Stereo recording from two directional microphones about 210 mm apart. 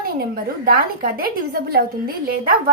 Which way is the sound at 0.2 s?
45° right (ahead or behind).